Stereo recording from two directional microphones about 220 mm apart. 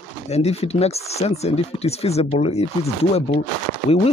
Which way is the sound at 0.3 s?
30° left (ahead or behind).